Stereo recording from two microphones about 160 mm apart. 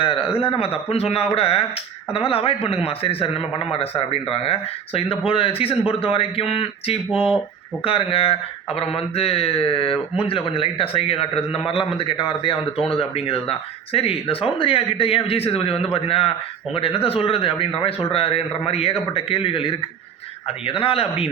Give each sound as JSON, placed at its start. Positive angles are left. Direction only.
{"t": 0.0, "sound": "speech", "side_deg": 35}
{"t": 7.1, "sound": "speech", "side_deg": -5}
{"t": 7.9, "sound": "speech", "side_deg": 35}